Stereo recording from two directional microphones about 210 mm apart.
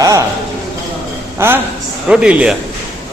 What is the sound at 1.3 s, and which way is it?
A man's voice, 10° right (ahead or behind).